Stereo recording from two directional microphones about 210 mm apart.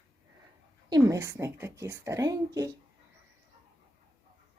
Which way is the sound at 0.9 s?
15° right (ahead or behind).